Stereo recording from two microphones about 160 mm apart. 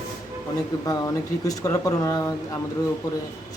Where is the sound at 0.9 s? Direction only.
20° left (ahead or behind).